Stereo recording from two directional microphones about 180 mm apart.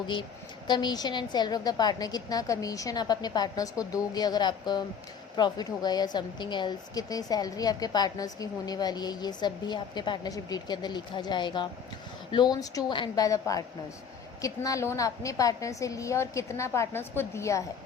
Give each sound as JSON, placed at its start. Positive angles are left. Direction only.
{"t": 0.7, "sound": "a woman's voice", "side_deg": 25}